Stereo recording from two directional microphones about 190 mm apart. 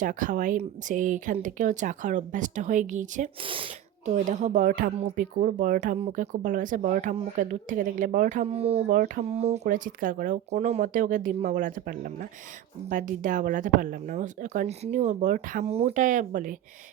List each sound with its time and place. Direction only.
0.0 s speech: 45° right (ahead or behind)
3.4 s speech: 30° right (ahead or behind); by 16.6 s 45° right (ahead or behind)